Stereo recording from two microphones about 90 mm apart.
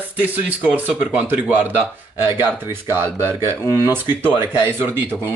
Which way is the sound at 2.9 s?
25° right (ahead or behind).